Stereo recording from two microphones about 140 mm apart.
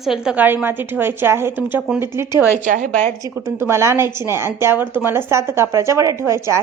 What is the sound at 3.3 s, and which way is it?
A woman's voice, 20° right (ahead or behind).